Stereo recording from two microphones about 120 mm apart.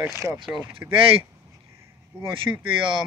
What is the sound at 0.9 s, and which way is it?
Speech, 50° right (ahead or behind).